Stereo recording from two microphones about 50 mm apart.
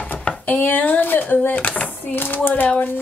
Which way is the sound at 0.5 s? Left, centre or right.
Left.